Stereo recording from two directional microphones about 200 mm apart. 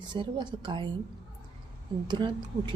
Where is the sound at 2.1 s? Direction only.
25° right (ahead or behind).